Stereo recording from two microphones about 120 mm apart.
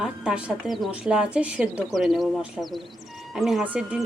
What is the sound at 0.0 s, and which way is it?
A woman's voice, 5° right (ahead or behind).